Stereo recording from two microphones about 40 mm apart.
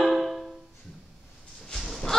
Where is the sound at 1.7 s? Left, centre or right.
Centre.